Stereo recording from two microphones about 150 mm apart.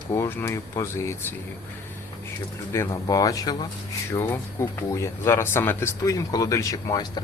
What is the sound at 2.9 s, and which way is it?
Speech, 25° left (ahead or behind).